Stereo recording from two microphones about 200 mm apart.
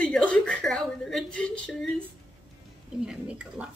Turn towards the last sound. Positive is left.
turn(degrees=-5)  # may be behind; listen again after turning